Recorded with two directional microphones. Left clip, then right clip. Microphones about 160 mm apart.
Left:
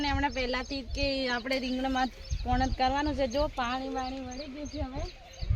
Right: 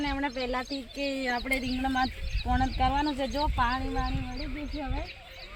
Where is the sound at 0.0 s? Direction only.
30° left (ahead or behind).